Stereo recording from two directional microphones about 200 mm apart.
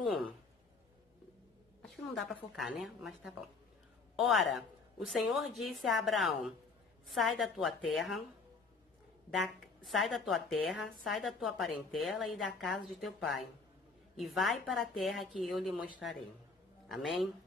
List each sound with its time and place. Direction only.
1.8 s a woman's voice: centre (ahead or behind)
9.8 s a woman's voice: centre (ahead or behind)
14.1 s a woman's voice: centre (ahead or behind)